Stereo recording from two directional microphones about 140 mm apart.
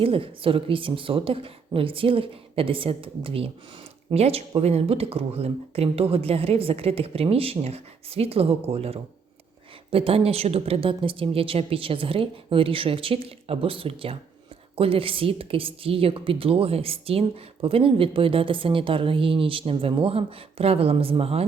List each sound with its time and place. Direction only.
0.0 s a woman's voice: 40° right (ahead or behind)